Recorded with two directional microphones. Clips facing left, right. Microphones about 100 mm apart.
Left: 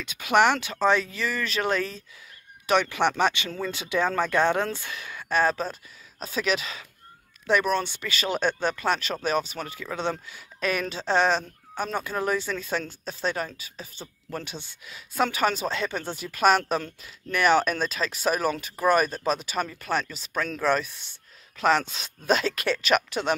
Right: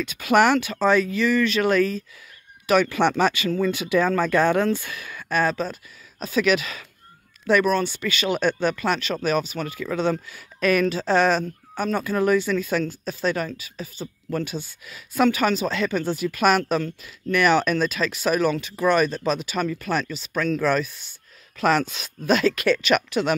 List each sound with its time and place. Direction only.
0.0 s speech: 20° left (ahead or behind)